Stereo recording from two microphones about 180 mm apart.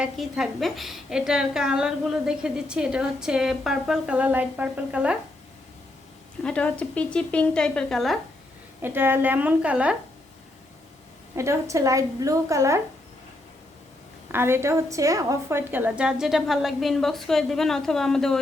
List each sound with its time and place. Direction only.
0.0 s a woman's voice: 5° right (ahead or behind)
6.4 s a woman's voice: 5° left (ahead or behind)
8.8 s a woman's voice: 10° right (ahead or behind)
11.3 s a woman's voice: 15° right (ahead or behind)
14.3 s a woman's voice: 15° right (ahead or behind); by 18.3 s centre (ahead or behind)